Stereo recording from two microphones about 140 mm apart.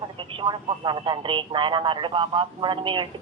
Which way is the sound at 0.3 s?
35° right (ahead or behind).